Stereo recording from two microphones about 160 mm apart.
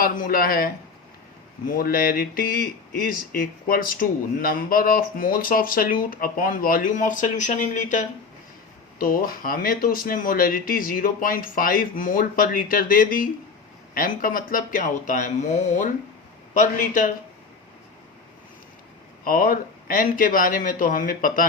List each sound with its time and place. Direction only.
0.0 s speech: 65° left (ahead or behind)
9.0 s speech: 65° left (ahead or behind)
19.2 s speech: 65° left (ahead or behind)